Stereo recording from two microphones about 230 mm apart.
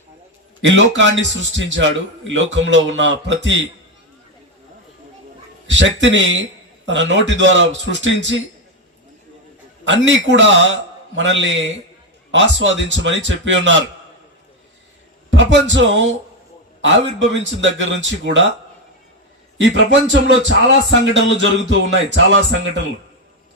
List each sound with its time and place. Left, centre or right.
0.6 s a man's voice: right
5.6 s a man's voice: right
9.8 s a man's voice: right
15.3 s a man's voice: right
16.8 s a man's voice: right
19.5 s a man's voice: right